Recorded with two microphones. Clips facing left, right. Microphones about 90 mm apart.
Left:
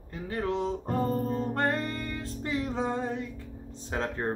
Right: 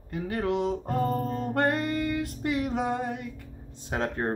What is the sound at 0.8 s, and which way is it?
Music, 20° left (ahead or behind).